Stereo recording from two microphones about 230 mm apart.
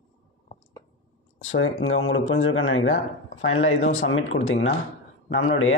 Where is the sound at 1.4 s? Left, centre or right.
Left.